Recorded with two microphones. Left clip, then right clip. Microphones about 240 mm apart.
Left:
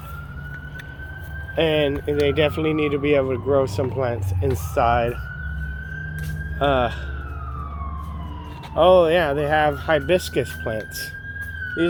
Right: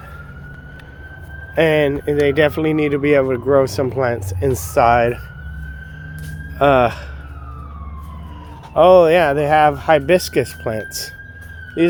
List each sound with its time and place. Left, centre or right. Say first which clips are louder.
1.5 s speech: right 5 dB; right
6.6 s speech: right 7 dB; right
8.7 s speech: right 5 dB; right